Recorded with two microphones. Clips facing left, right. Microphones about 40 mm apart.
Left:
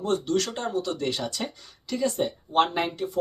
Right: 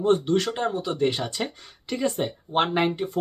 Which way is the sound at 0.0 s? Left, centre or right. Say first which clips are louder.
Right 4 dB; right.